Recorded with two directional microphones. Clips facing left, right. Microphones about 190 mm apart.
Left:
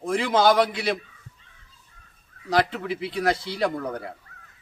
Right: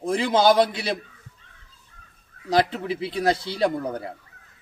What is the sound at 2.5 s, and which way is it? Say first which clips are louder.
Speech: right 2 dB; 30° right (ahead or behind).